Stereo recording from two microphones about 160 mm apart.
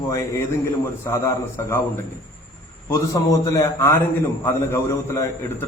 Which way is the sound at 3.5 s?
15° left (ahead or behind).